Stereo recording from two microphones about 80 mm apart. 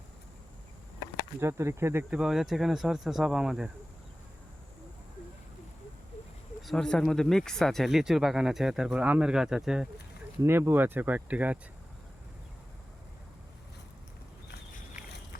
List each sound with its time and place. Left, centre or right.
1.4 s speech: right
2.0 s speech: centre
6.6 s speech: centre
9.0 s speech: centre
10.4 s speech: right
15.0 s a sound: centre